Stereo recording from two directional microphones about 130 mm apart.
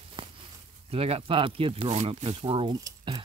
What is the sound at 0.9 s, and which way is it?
Speech, 50° right (ahead or behind).